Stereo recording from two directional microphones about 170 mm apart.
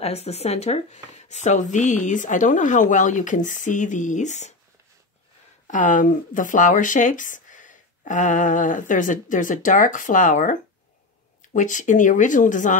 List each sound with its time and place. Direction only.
0.0 s speech: 40° left (ahead or behind)
5.7 s speech: 50° left (ahead or behind)